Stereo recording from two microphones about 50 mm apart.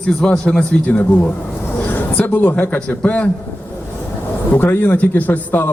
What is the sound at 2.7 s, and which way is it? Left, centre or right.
Speech, left.